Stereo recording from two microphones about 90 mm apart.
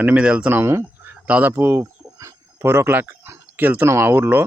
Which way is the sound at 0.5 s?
30° right (ahead or behind).